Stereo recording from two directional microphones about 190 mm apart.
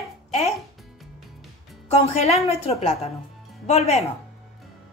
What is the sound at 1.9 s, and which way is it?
Speech, 35° left (ahead or behind).